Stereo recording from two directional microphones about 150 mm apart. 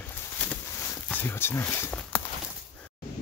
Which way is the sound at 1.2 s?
15° left (ahead or behind).